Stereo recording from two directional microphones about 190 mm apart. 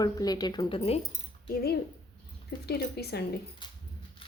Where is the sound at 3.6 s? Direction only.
25° left (ahead or behind).